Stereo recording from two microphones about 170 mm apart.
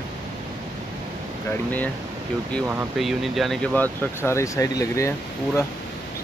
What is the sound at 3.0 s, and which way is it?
Speech, centre (ahead or behind).